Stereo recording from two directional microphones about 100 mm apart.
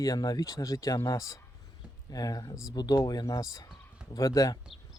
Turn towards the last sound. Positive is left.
turn(degrees=35)  # may be behind; listen again after turning